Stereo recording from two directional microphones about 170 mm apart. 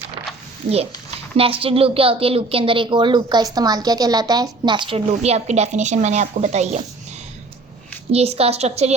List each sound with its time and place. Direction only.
1.4 s a woman's voice: 30° right (ahead or behind)
8.1 s a woman's voice: 35° right (ahead or behind)